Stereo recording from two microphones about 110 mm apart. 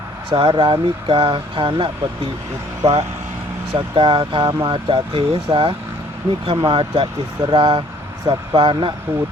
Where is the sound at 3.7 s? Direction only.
50° right (ahead or behind).